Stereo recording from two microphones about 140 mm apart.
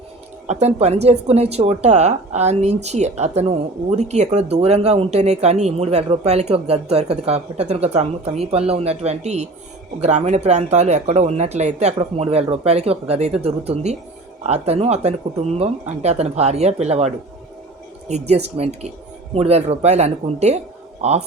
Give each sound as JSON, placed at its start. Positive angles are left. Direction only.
{"t": 0.4, "sound": "speech", "side_deg": -50}
{"t": 18.1, "sound": "speech", "side_deg": -50}